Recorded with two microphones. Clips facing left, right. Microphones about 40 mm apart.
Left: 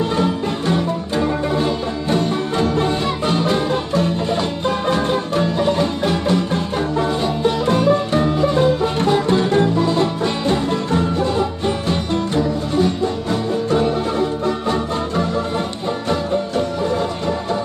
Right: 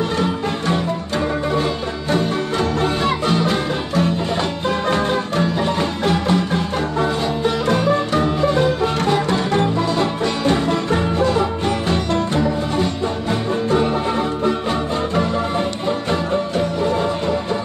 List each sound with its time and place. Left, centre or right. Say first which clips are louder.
1.6 s music: left 2 dB; centre
3.5 s music: left 1 dB; centre
13.7 s music: left 1 dB; right